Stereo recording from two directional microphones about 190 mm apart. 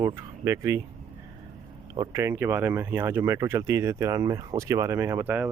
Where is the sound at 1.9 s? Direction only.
20° right (ahead or behind).